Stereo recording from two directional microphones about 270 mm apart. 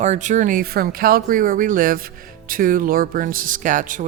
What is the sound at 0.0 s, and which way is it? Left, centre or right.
Speech, right.